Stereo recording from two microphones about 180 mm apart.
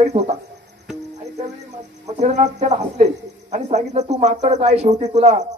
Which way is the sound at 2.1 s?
40° right (ahead or behind).